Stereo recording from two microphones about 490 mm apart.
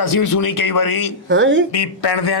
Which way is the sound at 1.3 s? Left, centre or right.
Right.